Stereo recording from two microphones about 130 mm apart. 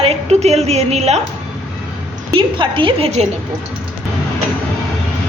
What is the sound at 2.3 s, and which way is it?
Speech, 40° right (ahead or behind).